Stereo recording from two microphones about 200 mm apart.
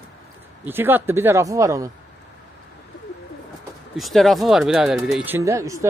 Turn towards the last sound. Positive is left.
turn(degrees=-15)  # may be behind; listen again after turning